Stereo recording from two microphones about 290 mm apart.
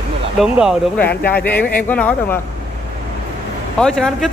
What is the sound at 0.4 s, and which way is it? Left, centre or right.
A woman's voice, centre.